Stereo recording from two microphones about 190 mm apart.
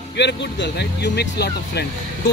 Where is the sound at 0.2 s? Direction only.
65° left (ahead or behind).